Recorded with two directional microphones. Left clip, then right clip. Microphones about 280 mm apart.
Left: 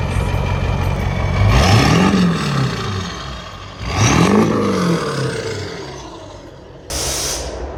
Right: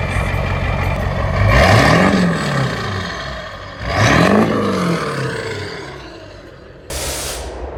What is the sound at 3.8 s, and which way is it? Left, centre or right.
Roar, centre.